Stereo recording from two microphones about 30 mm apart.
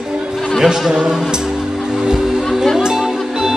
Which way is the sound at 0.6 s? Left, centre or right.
Right.